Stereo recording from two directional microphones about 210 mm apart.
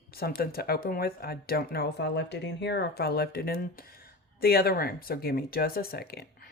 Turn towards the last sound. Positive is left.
turn(degrees=45)  # may be behind; listen again after turning